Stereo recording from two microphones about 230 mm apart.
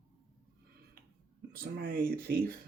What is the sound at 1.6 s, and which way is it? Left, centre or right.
Speech, right.